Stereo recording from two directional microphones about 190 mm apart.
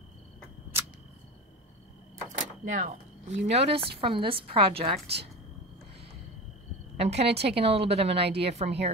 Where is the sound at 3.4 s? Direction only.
30° right (ahead or behind).